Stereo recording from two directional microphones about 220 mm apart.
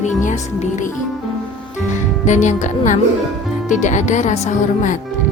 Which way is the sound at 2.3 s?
35° left (ahead or behind).